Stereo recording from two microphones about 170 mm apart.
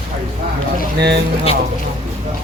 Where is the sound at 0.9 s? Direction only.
80° right.